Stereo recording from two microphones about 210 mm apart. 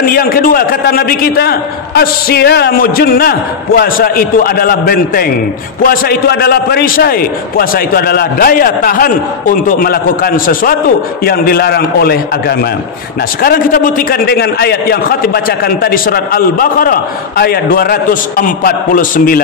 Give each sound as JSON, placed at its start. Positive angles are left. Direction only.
{"t": 0.0, "sound": "a man's voice", "side_deg": 45}